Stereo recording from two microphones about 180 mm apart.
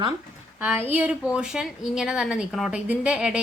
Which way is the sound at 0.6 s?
10° right (ahead or behind).